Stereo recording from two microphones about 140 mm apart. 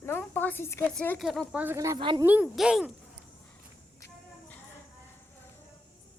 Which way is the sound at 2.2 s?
10° right (ahead or behind).